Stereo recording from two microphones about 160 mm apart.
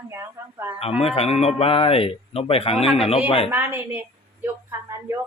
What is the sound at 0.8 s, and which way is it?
Speech, 40° left (ahead or behind).